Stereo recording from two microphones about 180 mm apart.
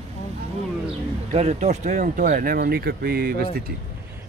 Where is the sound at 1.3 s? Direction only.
40° right (ahead or behind); by 3.5 s 55° right (ahead or behind).